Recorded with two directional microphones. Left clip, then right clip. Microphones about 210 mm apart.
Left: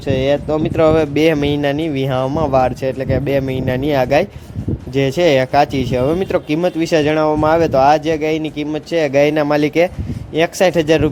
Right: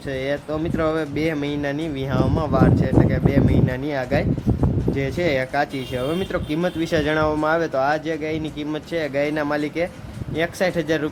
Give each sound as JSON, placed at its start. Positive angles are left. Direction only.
{"t": 0.1, "sound": "speech", "side_deg": 30}